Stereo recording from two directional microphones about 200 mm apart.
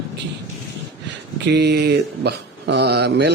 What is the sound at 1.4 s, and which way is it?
Speech, 60° right (ahead or behind).